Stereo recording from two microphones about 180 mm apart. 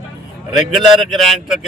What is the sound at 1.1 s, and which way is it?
Speech, centre (ahead or behind).